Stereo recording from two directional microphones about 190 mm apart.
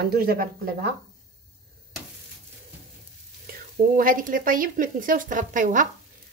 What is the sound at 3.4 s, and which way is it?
Speech, 45° right (ahead or behind).